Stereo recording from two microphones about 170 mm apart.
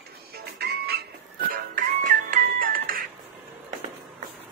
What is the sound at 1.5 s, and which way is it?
Music, 55° right (ahead or behind).